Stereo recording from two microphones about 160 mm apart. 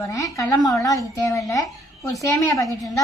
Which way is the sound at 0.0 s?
20° left (ahead or behind).